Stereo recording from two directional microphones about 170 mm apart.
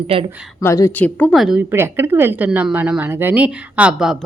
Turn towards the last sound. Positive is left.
turn(degrees=-5)  # may be behind; listen again after turning